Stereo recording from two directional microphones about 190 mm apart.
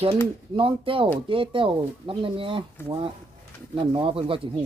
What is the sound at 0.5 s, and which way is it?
A man's voice, 30° right (ahead or behind).